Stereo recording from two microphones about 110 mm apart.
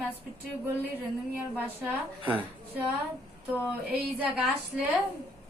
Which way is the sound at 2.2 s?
15° right (ahead or behind).